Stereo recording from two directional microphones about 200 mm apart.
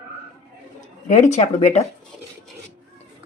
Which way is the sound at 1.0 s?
35° left (ahead or behind).